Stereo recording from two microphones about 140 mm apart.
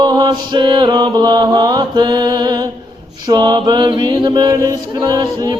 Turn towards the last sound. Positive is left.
turn(degrees=-30)  # may be behind; listen again after turning